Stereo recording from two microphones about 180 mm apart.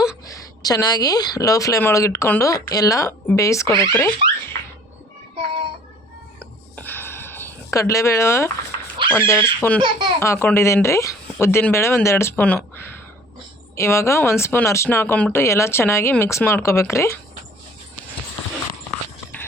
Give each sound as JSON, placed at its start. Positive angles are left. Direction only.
{"t": 0.3, "sound": "a woman's voice", "side_deg": 20}
{"t": 5.4, "sound": "music", "side_deg": -30}
{"t": 6.7, "sound": "a sound", "side_deg": 10}
{"t": 9.1, "sound": "speech", "side_deg": 15}